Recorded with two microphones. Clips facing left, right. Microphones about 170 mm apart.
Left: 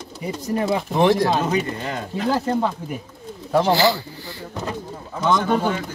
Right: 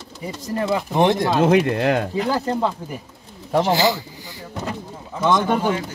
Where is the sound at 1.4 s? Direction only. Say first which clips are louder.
Right 7 dB; 75° right (ahead or behind).